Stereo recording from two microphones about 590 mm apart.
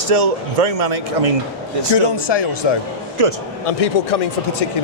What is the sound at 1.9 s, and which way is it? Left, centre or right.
Speech, left.